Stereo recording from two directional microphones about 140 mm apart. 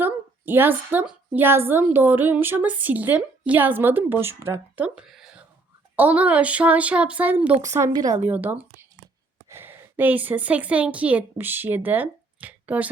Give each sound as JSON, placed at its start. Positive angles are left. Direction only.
{"t": 0.0, "sound": "a woman's voice", "side_deg": -15}
{"t": 7.6, "sound": "a woman's voice", "side_deg": -20}